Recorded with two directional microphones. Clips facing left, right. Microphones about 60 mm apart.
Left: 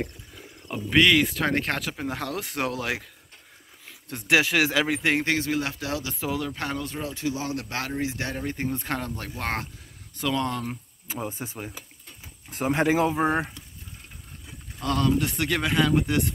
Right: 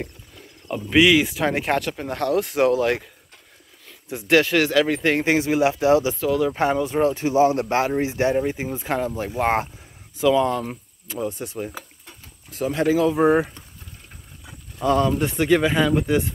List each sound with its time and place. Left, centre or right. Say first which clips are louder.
0.7 s speech: right 4 dB; centre
4.1 s speech: right 4 dB; centre
5.2 s speech: right 7 dB; centre
6.1 s speech: right 7 dB; centre
6.5 s speech: right 10 dB; right
7.0 s speech: right 16 dB; right; by 8.5 s centre
8.5 s speech: right 4 dB; centre
9.3 s speech: right 10 dB; right
10.1 s speech: right 8 dB; centre
11.1 s speech: right 5 dB; centre
12.4 s speech: right 2 dB; left
13.1 s speech: right 7 dB; centre
14.4 s a sound: right 8 dB; centre
15.2 s speech: right 7 dB; centre